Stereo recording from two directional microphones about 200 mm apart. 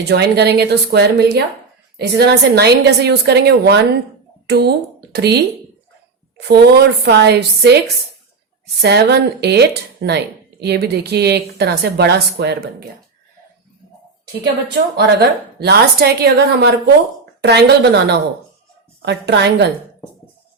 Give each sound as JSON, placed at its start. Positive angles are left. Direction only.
{"t": 0.1, "sound": "a woman's voice", "side_deg": -55}
{"t": 8.8, "sound": "a woman's voice", "side_deg": -55}
{"t": 14.4, "sound": "a woman's voice", "side_deg": -55}